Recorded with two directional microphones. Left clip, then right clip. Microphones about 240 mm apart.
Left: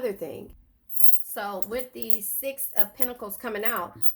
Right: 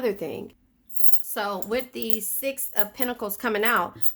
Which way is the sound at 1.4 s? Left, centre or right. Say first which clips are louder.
Right 4 dB; right.